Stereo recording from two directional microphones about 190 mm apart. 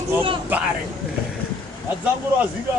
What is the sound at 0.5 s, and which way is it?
Speech, 10° right (ahead or behind).